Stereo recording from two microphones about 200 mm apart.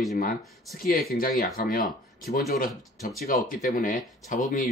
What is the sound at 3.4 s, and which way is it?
Speech, 45° left (ahead or behind).